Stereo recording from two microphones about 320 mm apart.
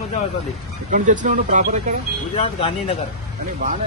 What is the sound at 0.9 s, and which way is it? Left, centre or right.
Speech, right.